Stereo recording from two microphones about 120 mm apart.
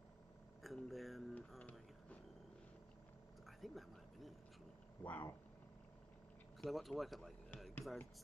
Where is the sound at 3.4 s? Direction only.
Centre (ahead or behind).